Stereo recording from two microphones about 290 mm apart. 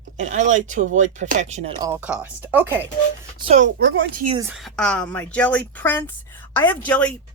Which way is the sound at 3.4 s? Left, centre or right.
Right.